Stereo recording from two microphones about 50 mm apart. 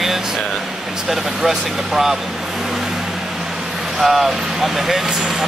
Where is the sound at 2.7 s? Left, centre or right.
Centre.